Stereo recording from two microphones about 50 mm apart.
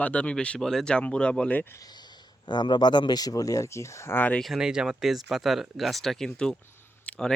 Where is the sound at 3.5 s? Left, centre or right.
Left.